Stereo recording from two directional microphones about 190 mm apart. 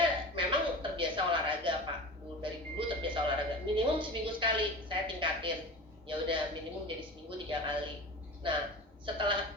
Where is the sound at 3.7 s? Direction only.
25° right (ahead or behind).